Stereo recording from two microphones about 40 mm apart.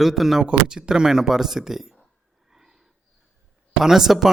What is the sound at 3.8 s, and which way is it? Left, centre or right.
Speech, centre.